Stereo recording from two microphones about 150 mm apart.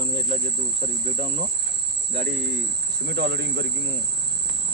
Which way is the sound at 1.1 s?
50° right (ahead or behind).